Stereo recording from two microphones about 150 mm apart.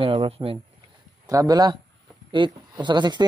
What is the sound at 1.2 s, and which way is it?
Speech, 25° right (ahead or behind).